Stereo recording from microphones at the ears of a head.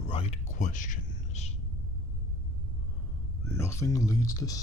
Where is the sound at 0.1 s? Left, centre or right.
Left.